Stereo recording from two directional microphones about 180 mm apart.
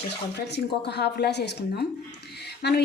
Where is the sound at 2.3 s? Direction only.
65° left (ahead or behind).